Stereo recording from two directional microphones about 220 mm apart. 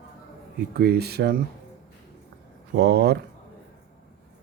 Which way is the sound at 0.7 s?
45° right (ahead or behind).